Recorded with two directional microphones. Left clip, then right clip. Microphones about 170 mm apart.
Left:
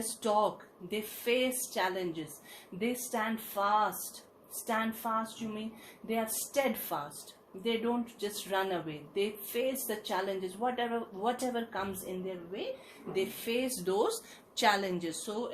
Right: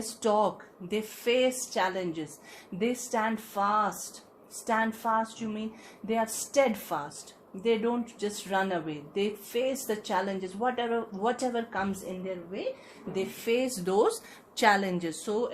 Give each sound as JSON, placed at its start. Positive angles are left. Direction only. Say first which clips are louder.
{"t": 0.2, "sound": "speech", "louder": "right 3 dB", "side_deg": -45}
{"t": 13.1, "sound": "speech", "louder": "right 4 dB", "side_deg": -50}